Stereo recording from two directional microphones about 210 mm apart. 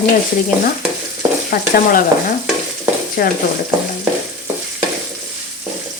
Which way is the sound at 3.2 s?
45° left (ahead or behind).